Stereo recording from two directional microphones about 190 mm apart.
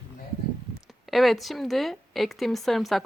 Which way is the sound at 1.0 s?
Centre (ahead or behind).